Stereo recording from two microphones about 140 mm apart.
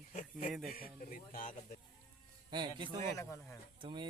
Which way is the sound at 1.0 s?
75° left (ahead or behind).